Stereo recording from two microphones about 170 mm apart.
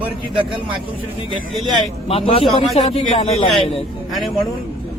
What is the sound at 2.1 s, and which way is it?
Speech, 35° left (ahead or behind).